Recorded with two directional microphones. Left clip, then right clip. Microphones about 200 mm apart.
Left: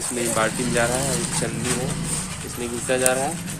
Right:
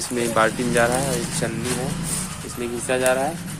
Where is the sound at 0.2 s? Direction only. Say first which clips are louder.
Right 3 dB; 25° right (ahead or behind).